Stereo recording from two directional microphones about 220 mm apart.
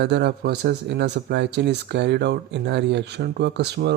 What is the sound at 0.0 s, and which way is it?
Speech, 50° right (ahead or behind).